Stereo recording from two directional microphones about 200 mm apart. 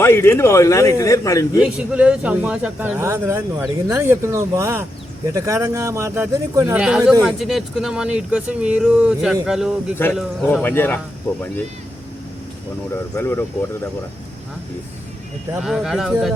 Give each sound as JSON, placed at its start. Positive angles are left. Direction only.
{"t": 0.0, "sound": "a man's voice", "side_deg": 10}
{"t": 1.6, "sound": "speech", "side_deg": -5}
{"t": 6.8, "sound": "a man's voice", "side_deg": 0}
{"t": 12.9, "sound": "a man's voice", "side_deg": 10}
{"t": 15.5, "sound": "speech", "side_deg": 0}